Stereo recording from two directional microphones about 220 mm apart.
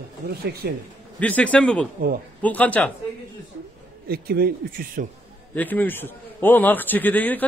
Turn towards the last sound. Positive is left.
turn(degrees=10)  # may be behind; listen again after turning